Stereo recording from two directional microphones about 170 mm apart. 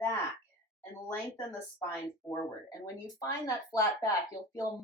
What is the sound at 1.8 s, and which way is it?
Speech, 15° left (ahead or behind).